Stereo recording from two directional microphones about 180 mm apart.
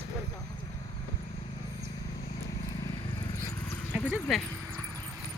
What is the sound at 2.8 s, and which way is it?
Vehicle, 15° left (ahead or behind).